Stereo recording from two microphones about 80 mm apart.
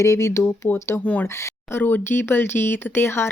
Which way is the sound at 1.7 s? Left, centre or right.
Left.